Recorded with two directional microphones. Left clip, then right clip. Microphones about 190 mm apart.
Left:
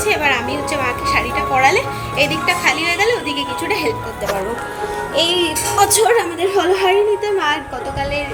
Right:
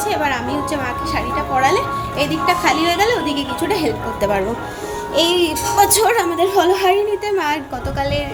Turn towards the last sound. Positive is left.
turn(degrees=-20)  # may be behind; listen again after turning